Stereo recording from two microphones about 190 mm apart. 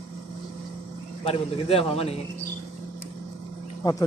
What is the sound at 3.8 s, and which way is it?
Speech, 20° left (ahead or behind).